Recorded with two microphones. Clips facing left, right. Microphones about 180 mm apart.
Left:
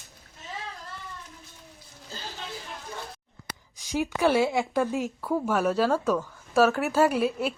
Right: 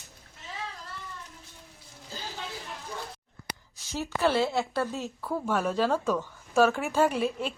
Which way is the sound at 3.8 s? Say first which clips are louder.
Left 3 dB; 15° left (ahead or behind).